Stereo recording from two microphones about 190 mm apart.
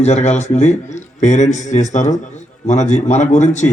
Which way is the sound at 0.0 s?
35° left (ahead or behind).